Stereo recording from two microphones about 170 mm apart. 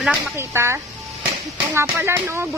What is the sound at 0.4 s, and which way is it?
Speech, 15° right (ahead or behind).